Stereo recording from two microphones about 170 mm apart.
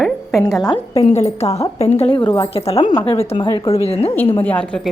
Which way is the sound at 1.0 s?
40° left (ahead or behind).